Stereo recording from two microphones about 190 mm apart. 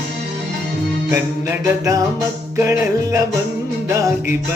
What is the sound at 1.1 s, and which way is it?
Mantra, 15° right (ahead or behind).